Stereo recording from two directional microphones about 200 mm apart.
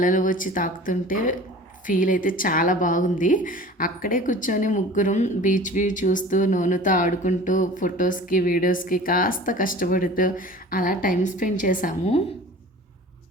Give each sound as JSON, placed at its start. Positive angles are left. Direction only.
{"t": 0.0, "sound": "a woman's voice", "side_deg": 40}